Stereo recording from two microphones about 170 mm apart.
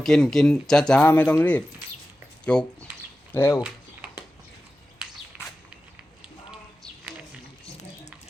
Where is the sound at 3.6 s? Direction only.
10° right (ahead or behind).